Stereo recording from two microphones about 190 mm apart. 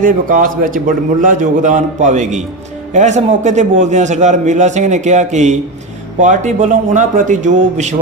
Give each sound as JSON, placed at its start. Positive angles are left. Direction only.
{"t": 0.0, "sound": "a man's voice", "side_deg": -45}